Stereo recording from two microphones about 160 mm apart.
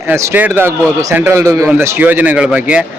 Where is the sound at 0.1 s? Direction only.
10° right (ahead or behind).